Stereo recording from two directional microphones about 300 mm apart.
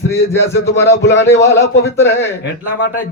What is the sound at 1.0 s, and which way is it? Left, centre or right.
Speech, left.